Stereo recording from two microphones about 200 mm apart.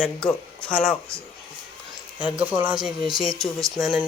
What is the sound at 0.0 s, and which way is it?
Speech, 5° left (ahead or behind).